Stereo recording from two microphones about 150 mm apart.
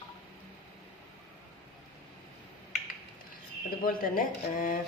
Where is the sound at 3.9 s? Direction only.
70° left (ahead or behind).